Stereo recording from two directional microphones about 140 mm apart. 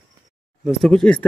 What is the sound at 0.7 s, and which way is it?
Speech, centre (ahead or behind).